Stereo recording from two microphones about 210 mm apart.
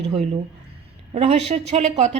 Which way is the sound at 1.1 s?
30° right (ahead or behind).